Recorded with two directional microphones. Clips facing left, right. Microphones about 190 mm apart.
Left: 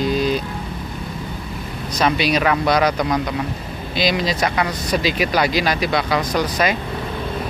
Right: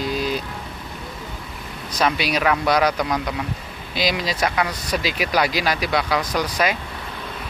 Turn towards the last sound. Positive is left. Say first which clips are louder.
# left 3 dB
turn(degrees=-10)  # may be behind; listen again after turning